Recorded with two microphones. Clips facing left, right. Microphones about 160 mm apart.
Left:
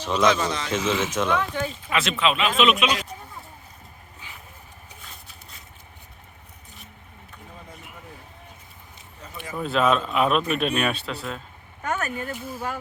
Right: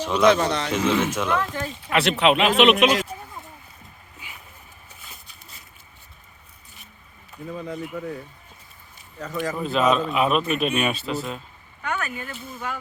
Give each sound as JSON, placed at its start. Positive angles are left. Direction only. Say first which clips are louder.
{"t": 0.0, "sound": "a man's voice", "louder": "right 2 dB", "side_deg": -10}
{"t": 0.3, "sound": "a man's voice", "louder": "right 6 dB", "side_deg": -60}
{"t": 1.1, "sound": "speech", "louder": "even", "side_deg": -5}
{"t": 1.9, "sound": "speech", "louder": "right 5 dB", "side_deg": -65}
{"t": 7.5, "sound": "speech", "louder": "right 14 dB", "side_deg": -90}
{"t": 9.2, "sound": "speech", "louder": "right 10 dB", "side_deg": -85}
{"t": 9.6, "sound": "speech", "louder": "even", "side_deg": 0}
{"t": 11.8, "sound": "speech", "louder": "left 1 dB", "side_deg": 40}